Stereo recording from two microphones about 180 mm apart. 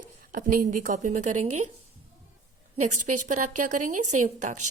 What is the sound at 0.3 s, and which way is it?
A woman's voice, 50° right (ahead or behind).